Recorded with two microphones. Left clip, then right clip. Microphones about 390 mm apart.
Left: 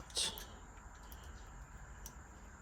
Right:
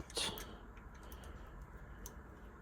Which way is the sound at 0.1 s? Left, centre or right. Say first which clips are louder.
Left 1 dB; centre.